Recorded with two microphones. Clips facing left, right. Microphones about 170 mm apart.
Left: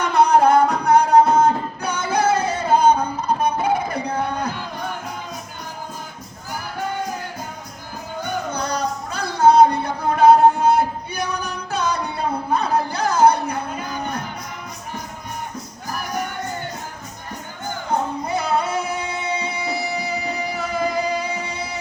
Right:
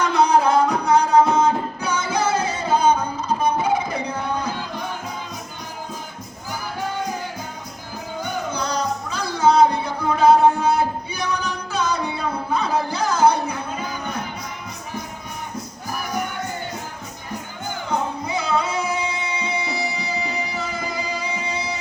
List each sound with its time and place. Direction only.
0.0 s music: 60° left (ahead or behind)
8.5 s music: 60° left (ahead or behind)
18.3 s music: 60° left (ahead or behind)